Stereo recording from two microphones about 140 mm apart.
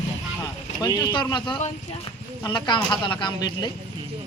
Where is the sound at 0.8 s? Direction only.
30° left (ahead or behind).